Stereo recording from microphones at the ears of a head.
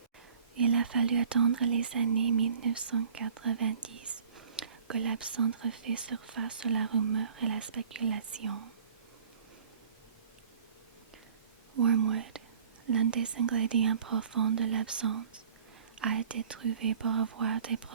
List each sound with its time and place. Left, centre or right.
0.5 s speech: right
11.7 s speech: right